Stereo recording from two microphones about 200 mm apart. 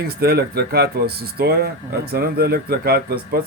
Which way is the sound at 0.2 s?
50° right (ahead or behind).